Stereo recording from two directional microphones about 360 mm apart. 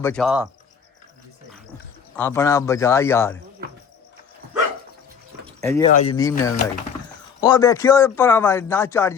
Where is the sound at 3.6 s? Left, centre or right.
Right.